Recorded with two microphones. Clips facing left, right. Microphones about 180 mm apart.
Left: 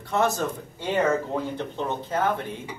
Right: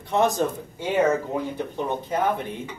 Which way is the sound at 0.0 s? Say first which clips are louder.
Right 3 dB; 15° right (ahead or behind).